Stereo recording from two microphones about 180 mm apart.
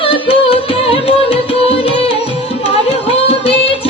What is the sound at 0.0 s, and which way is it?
Music, 30° left (ahead or behind).